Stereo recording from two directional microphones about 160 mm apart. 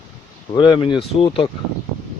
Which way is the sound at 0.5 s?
30° left (ahead or behind).